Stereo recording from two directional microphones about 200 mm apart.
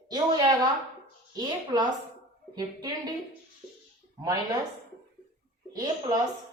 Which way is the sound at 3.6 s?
10° right (ahead or behind).